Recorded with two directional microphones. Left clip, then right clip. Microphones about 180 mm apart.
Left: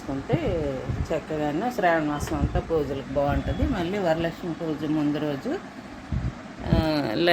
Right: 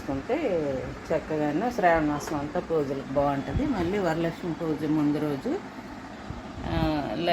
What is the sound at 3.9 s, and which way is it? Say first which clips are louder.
Speech: left 5 dB; 5° left (ahead or behind).